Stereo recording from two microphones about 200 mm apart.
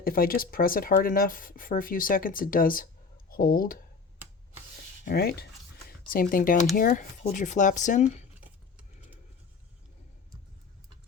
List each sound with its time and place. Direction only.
0.0 s speech: 45° left (ahead or behind)
5.0 s speech: 50° left (ahead or behind)